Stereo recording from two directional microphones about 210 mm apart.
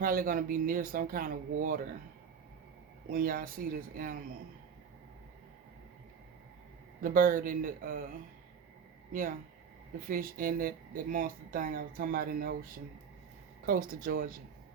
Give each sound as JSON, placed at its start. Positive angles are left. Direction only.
{"t": 0.0, "sound": "speech", "side_deg": -40}
{"t": 3.1, "sound": "speech", "side_deg": -40}
{"t": 7.0, "sound": "speech", "side_deg": -40}
{"t": 9.1, "sound": "speech", "side_deg": -40}
{"t": 13.7, "sound": "speech", "side_deg": -45}